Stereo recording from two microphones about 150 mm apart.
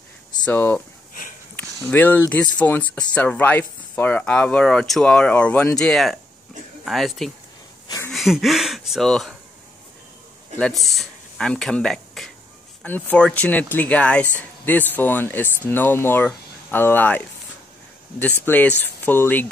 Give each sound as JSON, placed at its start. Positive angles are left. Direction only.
{"t": 0.5, "sound": "speech", "side_deg": 10}
{"t": 10.6, "sound": "speech", "side_deg": 0}